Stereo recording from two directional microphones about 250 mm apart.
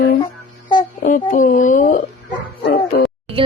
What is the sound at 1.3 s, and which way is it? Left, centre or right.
Speech, left.